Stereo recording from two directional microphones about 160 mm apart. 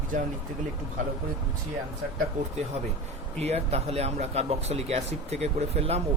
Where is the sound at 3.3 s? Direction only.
40° right (ahead or behind).